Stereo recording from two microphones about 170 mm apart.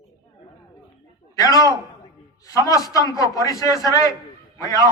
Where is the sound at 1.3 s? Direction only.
20° left (ahead or behind).